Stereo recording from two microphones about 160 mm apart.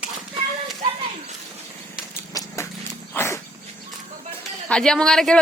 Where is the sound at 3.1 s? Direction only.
15° left (ahead or behind).